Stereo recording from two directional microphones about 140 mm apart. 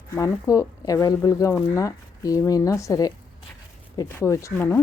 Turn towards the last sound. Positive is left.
turn(degrees=20)  # may be behind; listen again after turning